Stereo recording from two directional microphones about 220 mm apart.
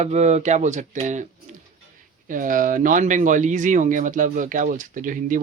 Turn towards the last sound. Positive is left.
turn(degrees=-40)  # may be behind; listen again after turning